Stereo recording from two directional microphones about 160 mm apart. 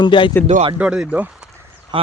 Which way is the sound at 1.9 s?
30° right (ahead or behind).